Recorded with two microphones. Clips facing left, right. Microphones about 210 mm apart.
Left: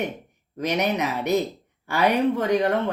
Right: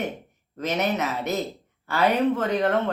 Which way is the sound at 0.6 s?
15° left (ahead or behind).